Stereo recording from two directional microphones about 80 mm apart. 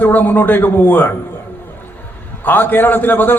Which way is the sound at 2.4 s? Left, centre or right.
Left.